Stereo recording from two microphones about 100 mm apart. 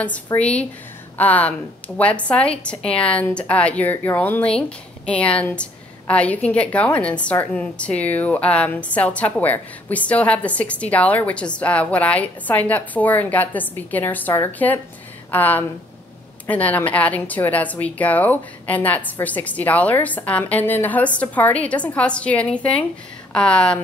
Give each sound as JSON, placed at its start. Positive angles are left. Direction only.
{"t": 0.4, "sound": "a woman's voice", "side_deg": 10}